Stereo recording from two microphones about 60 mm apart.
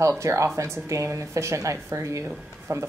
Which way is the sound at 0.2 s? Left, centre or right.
Right.